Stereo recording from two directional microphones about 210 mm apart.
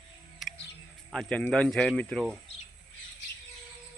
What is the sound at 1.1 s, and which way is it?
Speech, 5° left (ahead or behind).